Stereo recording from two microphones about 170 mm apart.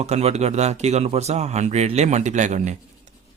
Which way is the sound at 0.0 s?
40° right (ahead or behind).